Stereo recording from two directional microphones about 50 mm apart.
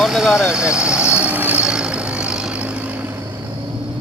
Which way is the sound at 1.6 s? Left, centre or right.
Centre.